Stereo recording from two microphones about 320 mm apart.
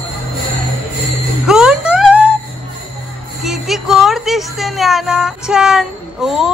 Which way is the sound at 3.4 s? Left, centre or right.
Centre.